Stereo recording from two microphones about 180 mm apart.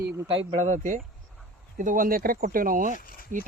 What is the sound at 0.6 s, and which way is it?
Speech, 45° right (ahead or behind).